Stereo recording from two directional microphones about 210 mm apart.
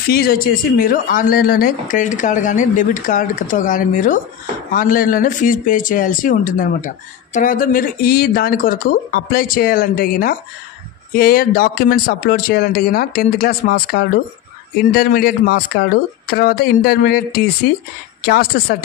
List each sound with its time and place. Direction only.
0.1 s speech: 45° left (ahead or behind)